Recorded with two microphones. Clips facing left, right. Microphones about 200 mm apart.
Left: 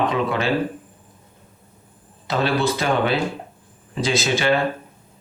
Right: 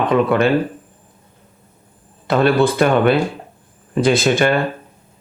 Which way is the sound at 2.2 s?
55° right (ahead or behind).